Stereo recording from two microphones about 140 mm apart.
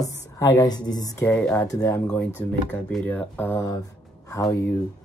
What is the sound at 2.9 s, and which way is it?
Speech, 10° left (ahead or behind).